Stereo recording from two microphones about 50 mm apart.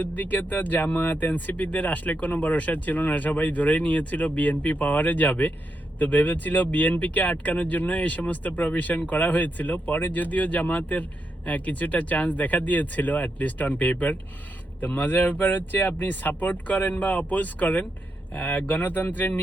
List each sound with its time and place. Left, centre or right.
0.0 s speech: left
15.0 s speech: left